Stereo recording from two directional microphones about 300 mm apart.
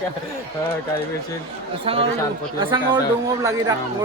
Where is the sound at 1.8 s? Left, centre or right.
Centre.